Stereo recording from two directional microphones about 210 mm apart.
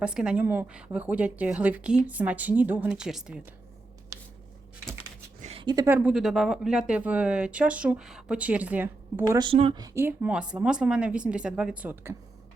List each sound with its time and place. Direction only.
0.0 s speech: 5° right (ahead or behind)
4.1 s writing: 20° right (ahead or behind)
5.4 s speech: 30° right (ahead or behind); by 9.5 s 15° right (ahead or behind)
9.5 s speech: 25° right (ahead or behind); by 12.1 s 10° right (ahead or behind)